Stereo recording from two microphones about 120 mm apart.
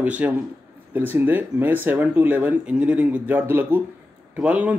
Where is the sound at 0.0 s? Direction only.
10° right (ahead or behind).